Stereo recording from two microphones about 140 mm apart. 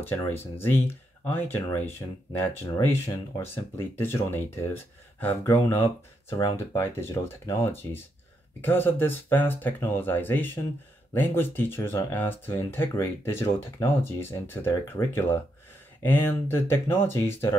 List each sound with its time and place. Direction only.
0.3 s speech: 15° left (ahead or behind)